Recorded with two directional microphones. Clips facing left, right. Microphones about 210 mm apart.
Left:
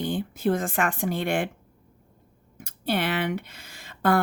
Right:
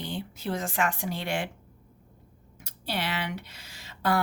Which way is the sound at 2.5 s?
50° left (ahead or behind).